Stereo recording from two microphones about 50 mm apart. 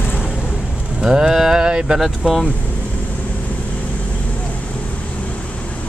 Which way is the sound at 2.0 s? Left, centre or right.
Centre.